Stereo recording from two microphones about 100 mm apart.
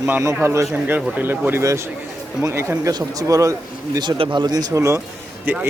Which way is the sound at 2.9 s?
35° right (ahead or behind).